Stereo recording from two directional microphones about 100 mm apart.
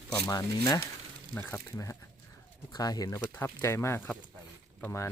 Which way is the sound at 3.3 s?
25° left (ahead or behind).